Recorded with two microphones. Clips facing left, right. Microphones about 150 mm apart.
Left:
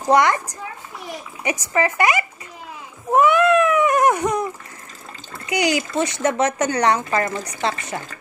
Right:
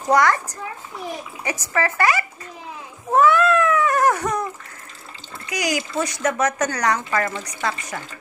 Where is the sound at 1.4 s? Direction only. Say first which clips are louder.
Left 3 dB; 20° left (ahead or behind).